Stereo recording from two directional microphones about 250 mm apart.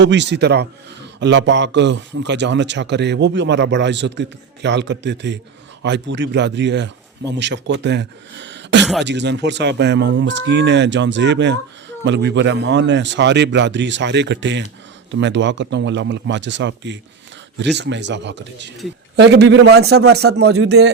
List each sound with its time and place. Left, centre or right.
0.0 s a man's voice: right
8.8 s speech: centre
9.0 s a man's voice: right